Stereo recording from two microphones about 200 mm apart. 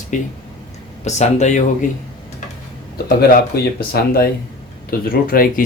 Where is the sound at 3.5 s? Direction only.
50° left (ahead or behind).